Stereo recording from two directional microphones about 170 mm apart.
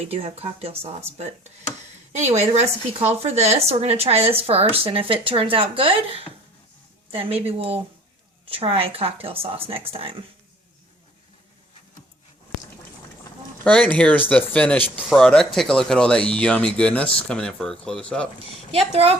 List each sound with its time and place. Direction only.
0.0 s speech: 35° right (ahead or behind)
2.1 s speech: 40° right (ahead or behind)
13.7 s speech: 10° left (ahead or behind)
18.7 s speech: 35° right (ahead or behind)